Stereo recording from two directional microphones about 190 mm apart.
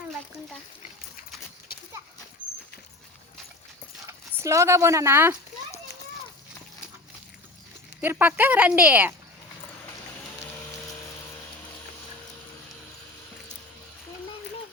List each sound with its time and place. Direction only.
1.7 s horse: 50° left (ahead or behind)
4.4 s speech: 15° right (ahead or behind)
8.0 s speech: 10° right (ahead or behind)